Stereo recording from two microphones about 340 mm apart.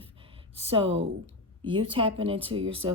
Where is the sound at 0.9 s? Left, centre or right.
Right.